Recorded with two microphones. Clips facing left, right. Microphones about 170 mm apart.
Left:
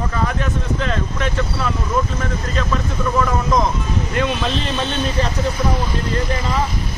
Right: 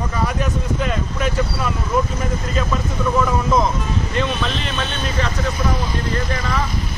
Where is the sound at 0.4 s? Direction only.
10° right (ahead or behind).